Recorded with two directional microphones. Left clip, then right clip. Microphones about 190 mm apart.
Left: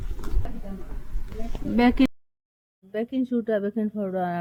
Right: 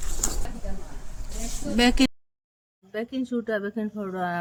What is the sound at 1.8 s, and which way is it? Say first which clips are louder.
Speech: even; 20° left (ahead or behind).